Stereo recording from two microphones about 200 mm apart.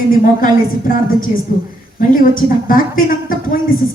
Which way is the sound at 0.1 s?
45° left (ahead or behind).